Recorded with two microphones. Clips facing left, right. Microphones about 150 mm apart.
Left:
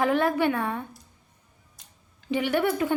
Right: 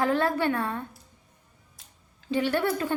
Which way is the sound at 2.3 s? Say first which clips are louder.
Left 1 dB; 15° left (ahead or behind).